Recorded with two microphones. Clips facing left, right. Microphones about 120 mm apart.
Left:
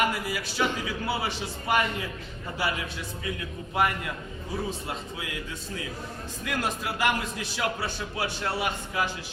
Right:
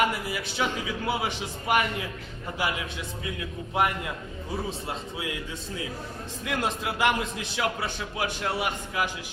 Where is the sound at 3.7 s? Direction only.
20° right (ahead or behind).